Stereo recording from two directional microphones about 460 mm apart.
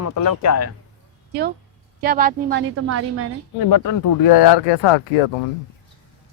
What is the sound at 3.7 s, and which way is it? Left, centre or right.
Speech, left.